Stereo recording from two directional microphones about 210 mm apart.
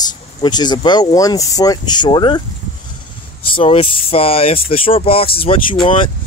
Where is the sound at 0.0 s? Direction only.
20° left (ahead or behind).